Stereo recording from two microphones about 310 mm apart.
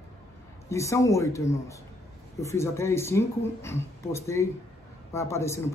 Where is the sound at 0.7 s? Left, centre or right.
Centre.